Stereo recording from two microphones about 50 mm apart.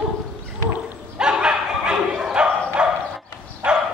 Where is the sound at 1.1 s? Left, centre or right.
Centre.